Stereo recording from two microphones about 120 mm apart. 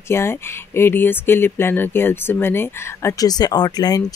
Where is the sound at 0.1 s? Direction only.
20° left (ahead or behind).